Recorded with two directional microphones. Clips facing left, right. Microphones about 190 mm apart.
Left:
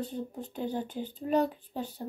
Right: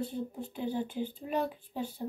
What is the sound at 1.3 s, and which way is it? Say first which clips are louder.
Speech: left 7 dB; 45° left (ahead or behind).